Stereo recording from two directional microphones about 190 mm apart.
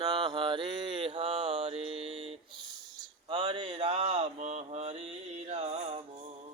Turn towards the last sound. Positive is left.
turn(degrees=-35)  # may be behind; listen again after turning